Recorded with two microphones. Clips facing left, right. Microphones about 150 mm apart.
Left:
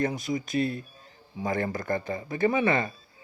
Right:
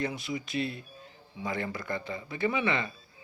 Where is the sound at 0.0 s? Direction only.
45° left (ahead or behind).